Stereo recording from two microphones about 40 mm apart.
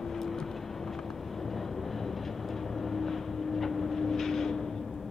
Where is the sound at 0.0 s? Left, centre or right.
Centre.